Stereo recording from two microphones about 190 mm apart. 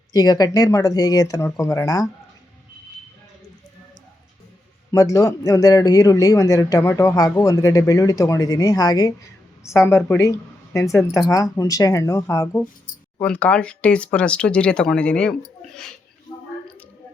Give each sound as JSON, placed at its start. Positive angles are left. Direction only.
{"t": 0.1, "sound": "speech", "side_deg": 20}
{"t": 4.9, "sound": "speech", "side_deg": 15}